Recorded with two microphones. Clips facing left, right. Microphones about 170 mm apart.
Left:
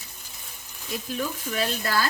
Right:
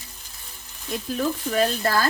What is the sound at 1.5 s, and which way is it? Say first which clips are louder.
Speech: right 6 dB; 45° right (ahead or behind).